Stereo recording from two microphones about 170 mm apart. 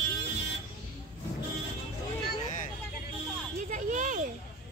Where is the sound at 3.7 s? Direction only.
45° right (ahead or behind).